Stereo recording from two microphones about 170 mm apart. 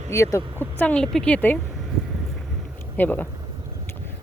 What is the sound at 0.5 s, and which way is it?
Speech, 15° right (ahead or behind).